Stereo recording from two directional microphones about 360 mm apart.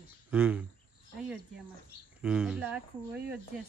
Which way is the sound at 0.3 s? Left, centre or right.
Centre.